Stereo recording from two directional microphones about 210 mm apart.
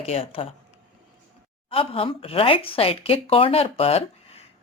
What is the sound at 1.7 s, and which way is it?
Speech, 25° left (ahead or behind).